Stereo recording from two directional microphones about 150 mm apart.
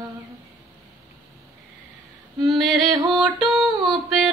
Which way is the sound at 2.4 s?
Centre (ahead or behind).